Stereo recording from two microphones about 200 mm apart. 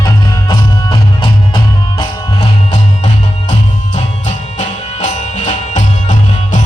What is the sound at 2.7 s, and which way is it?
Music, 35° left (ahead or behind).